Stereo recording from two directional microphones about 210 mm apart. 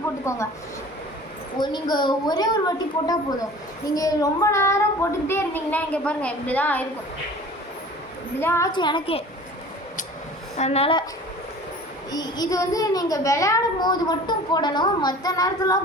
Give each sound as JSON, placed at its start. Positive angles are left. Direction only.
{"t": 0.3, "sound": "a child's voice", "side_deg": 15}
{"t": 1.5, "sound": "a woman's voice", "side_deg": 20}
{"t": 8.4, "sound": "a woman's voice", "side_deg": 10}
{"t": 10.6, "sound": "a woman's voice", "side_deg": 30}
{"t": 12.1, "sound": "a child's voice", "side_deg": 20}